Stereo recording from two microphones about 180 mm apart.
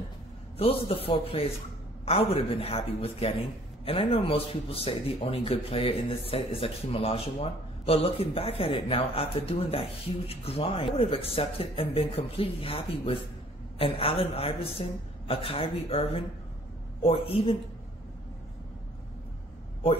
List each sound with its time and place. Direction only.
0.6 s a man's voice: 30° left (ahead or behind)